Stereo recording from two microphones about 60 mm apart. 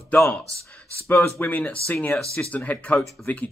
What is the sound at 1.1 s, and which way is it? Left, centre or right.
Speech, left.